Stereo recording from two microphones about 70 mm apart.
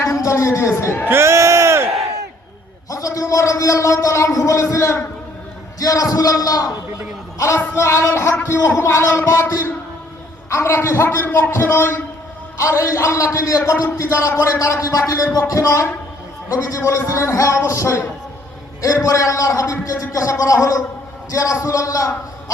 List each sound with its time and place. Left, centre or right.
0.0 s a woman's voice: left
1.0 s a sound: right
2.9 s a man's voice: left
5.8 s a man's voice: left
7.3 s a man's voice: left